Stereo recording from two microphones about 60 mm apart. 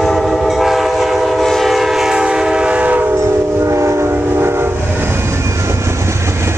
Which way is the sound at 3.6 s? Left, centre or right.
Right.